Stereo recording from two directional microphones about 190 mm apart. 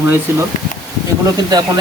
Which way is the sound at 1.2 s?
20° right (ahead or behind).